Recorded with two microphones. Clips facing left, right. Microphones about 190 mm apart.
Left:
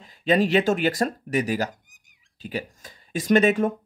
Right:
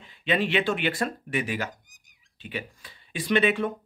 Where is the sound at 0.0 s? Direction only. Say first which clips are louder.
Left 5 dB; 40° left (ahead or behind).